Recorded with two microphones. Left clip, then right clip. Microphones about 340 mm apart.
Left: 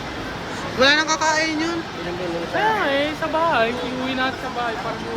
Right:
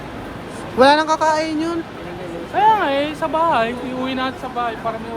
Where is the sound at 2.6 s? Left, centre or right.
Right.